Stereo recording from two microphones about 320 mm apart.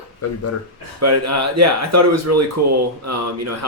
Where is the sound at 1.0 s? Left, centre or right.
Right.